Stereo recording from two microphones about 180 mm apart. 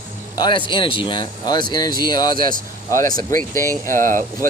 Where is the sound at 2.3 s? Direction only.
50° right (ahead or behind).